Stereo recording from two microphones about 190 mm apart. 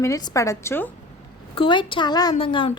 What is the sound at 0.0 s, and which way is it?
Speech, 15° left (ahead or behind).